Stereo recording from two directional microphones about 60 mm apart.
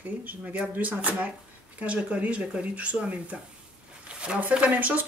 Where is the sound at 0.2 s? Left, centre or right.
Right.